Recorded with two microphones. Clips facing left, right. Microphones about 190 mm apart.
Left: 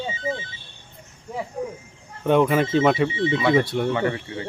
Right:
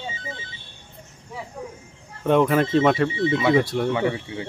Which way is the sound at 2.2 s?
Centre (ahead or behind).